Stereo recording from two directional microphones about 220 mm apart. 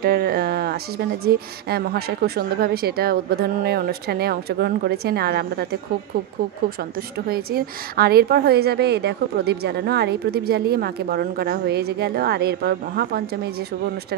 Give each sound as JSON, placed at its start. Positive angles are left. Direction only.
{"t": 0.0, "sound": "a woman's voice", "side_deg": -45}
{"t": 7.2, "sound": "a woman's voice", "side_deg": -45}